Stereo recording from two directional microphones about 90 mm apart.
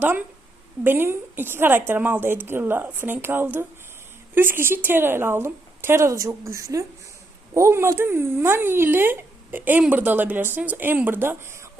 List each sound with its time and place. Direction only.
0.0 s a woman's voice: 20° right (ahead or behind)